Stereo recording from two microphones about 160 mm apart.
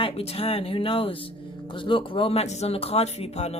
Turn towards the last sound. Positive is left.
turn(degrees=40)  # may be behind; listen again after turning